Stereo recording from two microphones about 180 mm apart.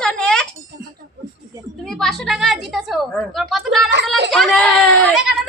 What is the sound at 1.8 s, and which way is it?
A woman's voice, centre (ahead or behind).